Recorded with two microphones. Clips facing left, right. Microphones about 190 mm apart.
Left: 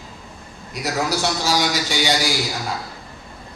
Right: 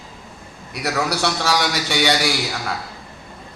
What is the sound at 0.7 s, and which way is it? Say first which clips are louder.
A man's voice: even; 65° right (ahead or behind).